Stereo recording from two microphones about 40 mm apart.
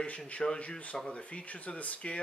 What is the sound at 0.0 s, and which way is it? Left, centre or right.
Speech, left.